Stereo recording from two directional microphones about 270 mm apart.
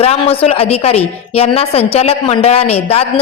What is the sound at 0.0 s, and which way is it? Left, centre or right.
A woman's voice, left.